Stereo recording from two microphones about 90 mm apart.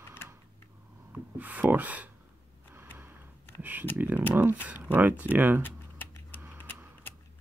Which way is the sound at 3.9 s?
20° right (ahead or behind).